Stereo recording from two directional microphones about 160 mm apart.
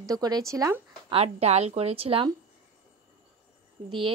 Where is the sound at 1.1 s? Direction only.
40° right (ahead or behind).